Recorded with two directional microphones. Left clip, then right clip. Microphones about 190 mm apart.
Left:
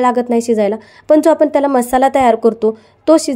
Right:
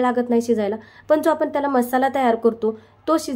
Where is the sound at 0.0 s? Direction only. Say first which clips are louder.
Left 6 dB; 35° left (ahead or behind).